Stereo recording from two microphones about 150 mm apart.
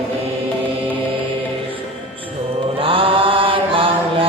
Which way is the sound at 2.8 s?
35° right (ahead or behind).